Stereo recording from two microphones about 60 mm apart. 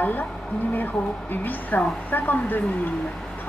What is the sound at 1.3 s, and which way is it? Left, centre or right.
A woman's voice, left.